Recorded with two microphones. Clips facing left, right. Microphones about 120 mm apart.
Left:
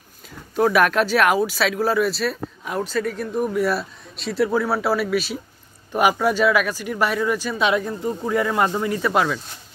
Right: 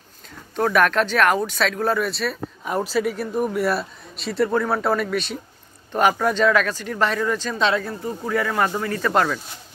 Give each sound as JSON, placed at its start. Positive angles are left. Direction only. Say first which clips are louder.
{"t": 0.6, "sound": "speech", "louder": "left 1 dB", "side_deg": 5}